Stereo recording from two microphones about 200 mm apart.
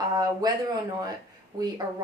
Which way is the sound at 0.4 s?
20° right (ahead or behind).